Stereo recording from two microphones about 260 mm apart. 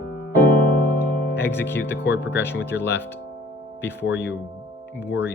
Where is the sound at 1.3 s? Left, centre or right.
Centre.